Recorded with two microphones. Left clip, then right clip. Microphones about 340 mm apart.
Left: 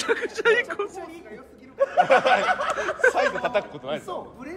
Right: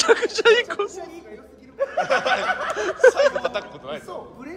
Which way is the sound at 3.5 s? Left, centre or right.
Left.